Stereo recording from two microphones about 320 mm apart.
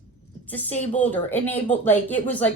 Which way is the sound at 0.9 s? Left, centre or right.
Centre.